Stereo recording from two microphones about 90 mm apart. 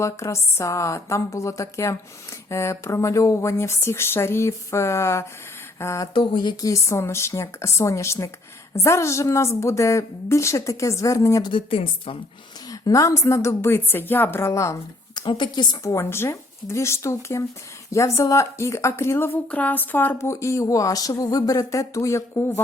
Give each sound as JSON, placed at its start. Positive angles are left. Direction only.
{"t": 0.0, "sound": "speech", "side_deg": 35}
{"t": 6.1, "sound": "speech", "side_deg": 60}
{"t": 6.7, "sound": "speech", "side_deg": 35}
{"t": 11.4, "sound": "speech", "side_deg": 80}
{"t": 12.7, "sound": "speech", "side_deg": 40}
{"t": 15.1, "sound": "a woman's voice", "side_deg": 60}
{"t": 15.9, "sound": "speech", "side_deg": 30}
{"t": 19.5, "sound": "speech", "side_deg": 15}
{"t": 20.2, "sound": "speech", "side_deg": 35}